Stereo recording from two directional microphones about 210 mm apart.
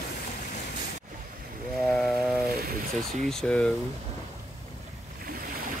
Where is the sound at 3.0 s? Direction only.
Centre (ahead or behind).